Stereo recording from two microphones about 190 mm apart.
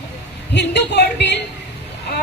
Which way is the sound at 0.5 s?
65° left (ahead or behind).